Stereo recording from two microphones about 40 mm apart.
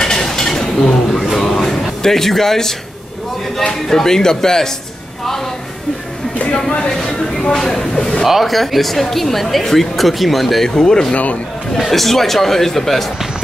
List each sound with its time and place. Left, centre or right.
0.0 s a sound: centre
3.5 s speech: centre
6.9 s speech: centre
8.3 s speech: centre
10.7 s speech: centre
11.7 s speech: centre